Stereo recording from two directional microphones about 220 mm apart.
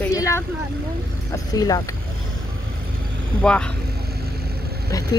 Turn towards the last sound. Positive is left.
turn(degrees=15)  # may be behind; listen again after turning